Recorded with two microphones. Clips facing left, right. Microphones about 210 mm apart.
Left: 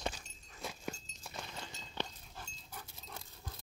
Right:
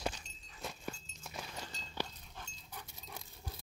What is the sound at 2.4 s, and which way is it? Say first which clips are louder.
Dog: even; centre (ahead or behind).